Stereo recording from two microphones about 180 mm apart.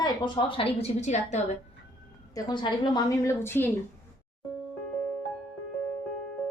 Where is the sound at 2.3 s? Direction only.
25° left (ahead or behind).